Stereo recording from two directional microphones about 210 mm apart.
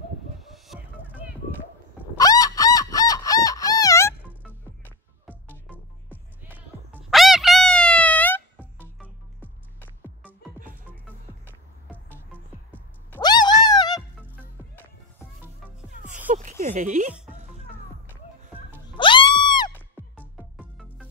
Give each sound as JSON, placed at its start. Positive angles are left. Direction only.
{"t": 0.4, "sound": "music", "side_deg": 0}
{"t": 2.1, "sound": "fowl", "side_deg": 15}
{"t": 6.0, "sound": "music", "side_deg": -10}
{"t": 8.5, "sound": "music", "side_deg": -5}
{"t": 13.2, "sound": "a sound", "side_deg": 20}
{"t": 16.3, "sound": "a sound", "side_deg": -40}
{"t": 18.9, "sound": "music", "side_deg": 25}
{"t": 20.2, "sound": "music", "side_deg": 0}